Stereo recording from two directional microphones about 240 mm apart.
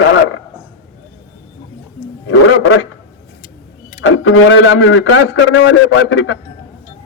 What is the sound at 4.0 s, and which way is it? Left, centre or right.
A man's voice, left.